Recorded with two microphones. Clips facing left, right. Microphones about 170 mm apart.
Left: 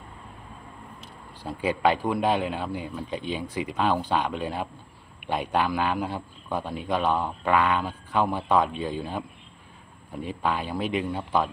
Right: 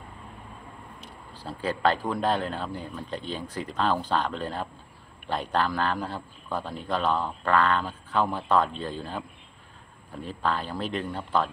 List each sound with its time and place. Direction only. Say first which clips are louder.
1.4 s a man's voice: left 2 dB; 15° left (ahead or behind)